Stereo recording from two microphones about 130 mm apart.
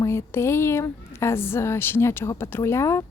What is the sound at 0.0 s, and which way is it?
Speech, 20° left (ahead or behind).